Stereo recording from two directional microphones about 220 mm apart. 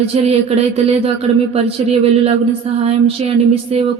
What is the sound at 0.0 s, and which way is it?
Music, 30° right (ahead or behind).